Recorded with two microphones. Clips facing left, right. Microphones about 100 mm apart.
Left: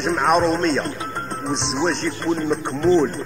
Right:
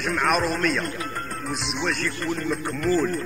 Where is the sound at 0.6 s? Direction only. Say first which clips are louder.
Left 4 dB; 30° left (ahead or behind).